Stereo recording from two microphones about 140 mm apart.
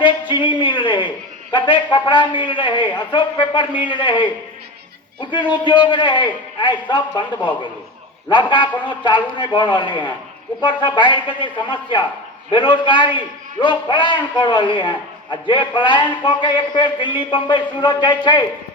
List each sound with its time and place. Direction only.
0.0 s a sound: 35° left (ahead or behind)
1.5 s a man's voice: 35° left (ahead or behind)
8.3 s a man's voice: 35° left (ahead or behind)